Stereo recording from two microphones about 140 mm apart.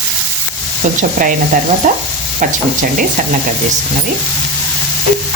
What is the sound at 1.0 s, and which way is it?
Stir, 70° right (ahead or behind).